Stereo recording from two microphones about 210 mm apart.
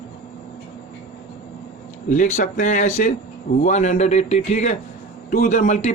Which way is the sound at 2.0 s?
35° left (ahead or behind).